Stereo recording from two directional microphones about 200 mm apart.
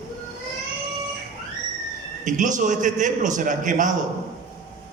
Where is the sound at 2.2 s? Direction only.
40° right (ahead or behind).